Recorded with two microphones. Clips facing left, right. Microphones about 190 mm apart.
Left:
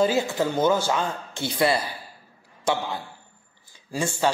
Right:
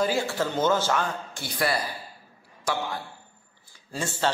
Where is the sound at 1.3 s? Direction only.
25° left (ahead or behind).